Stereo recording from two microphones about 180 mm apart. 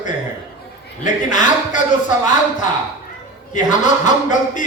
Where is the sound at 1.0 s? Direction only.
45° left (ahead or behind).